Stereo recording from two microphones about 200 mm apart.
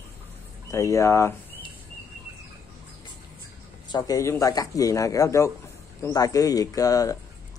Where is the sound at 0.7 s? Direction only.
15° left (ahead or behind).